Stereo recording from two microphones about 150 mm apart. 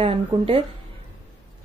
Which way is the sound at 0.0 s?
40° right (ahead or behind).